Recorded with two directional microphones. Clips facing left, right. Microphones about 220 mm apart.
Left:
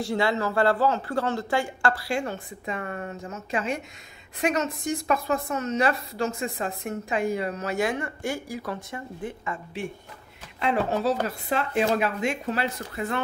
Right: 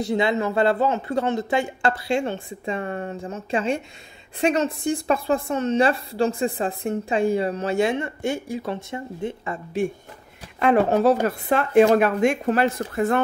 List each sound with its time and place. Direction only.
0.0 s a woman's voice: 20° right (ahead or behind)
10.6 s speech: 55° right (ahead or behind)